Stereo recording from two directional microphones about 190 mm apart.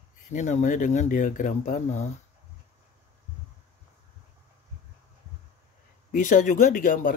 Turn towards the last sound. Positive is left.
turn(degrees=45)  # may be behind; listen again after turning